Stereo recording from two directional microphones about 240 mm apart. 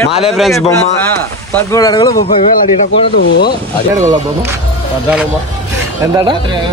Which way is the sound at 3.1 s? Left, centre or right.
Left.